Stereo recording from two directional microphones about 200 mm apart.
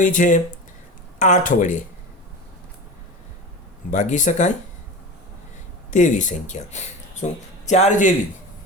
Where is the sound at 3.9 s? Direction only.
40° left (ahead or behind).